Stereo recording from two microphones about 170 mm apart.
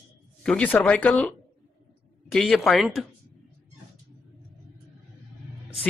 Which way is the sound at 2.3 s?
Centre (ahead or behind).